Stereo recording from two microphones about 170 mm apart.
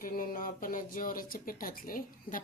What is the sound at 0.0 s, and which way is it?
Speech, 55° left (ahead or behind).